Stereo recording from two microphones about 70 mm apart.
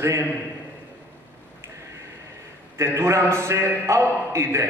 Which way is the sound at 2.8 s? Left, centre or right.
Right.